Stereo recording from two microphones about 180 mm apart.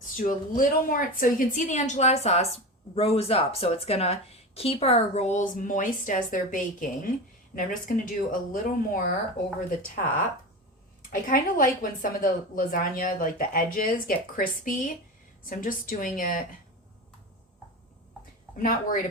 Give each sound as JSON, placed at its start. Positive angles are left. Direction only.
{"t": 0.2, "sound": "a woman's voice", "side_deg": 50}
{"t": 11.1, "sound": "a woman's voice", "side_deg": 50}
{"t": 18.5, "sound": "a woman's voice", "side_deg": 50}